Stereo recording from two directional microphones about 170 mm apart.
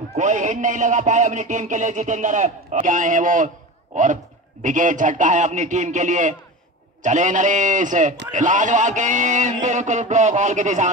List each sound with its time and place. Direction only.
0.1 s speech: 45° right (ahead or behind)